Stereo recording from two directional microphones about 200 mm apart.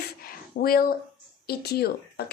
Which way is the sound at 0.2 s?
45° left (ahead or behind).